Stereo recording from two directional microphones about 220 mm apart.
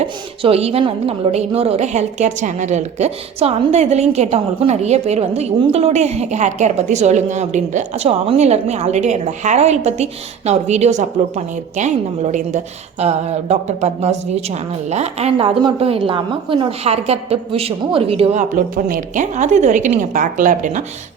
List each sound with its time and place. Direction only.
0.4 s a woman's voice: 25° right (ahead or behind)